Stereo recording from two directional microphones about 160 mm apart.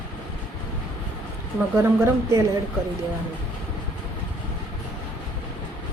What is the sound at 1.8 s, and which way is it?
Speech, 15° right (ahead or behind).